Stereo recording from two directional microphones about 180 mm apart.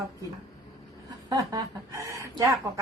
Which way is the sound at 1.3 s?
20° right (ahead or behind).